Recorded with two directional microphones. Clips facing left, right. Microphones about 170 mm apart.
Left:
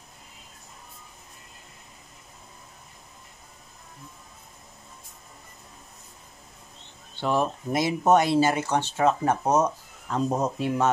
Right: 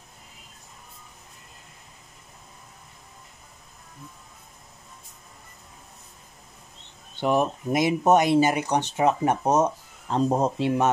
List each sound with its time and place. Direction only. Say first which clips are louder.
7.2 s speech: right 2 dB; 15° right (ahead or behind)